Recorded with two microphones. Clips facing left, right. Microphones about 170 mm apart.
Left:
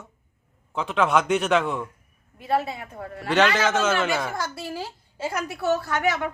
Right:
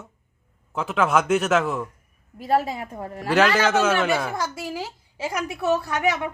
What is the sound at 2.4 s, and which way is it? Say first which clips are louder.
Speech: right 3 dB; 40° right (ahead or behind).